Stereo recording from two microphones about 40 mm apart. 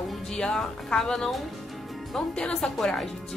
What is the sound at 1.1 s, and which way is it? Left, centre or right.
Speech, centre.